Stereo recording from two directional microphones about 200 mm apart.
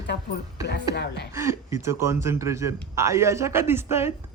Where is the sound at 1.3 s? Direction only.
15° right (ahead or behind).